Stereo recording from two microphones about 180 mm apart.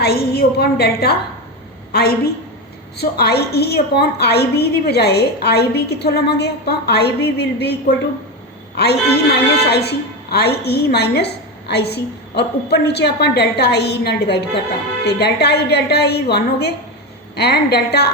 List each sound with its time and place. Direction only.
0.0 s a woman's voice: 60° left (ahead or behind)